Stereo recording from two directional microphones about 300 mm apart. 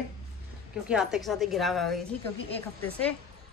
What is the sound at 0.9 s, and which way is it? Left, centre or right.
Speech, centre.